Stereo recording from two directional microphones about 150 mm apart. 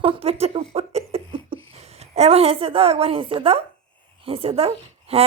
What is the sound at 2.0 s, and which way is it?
Speech, 45° right (ahead or behind).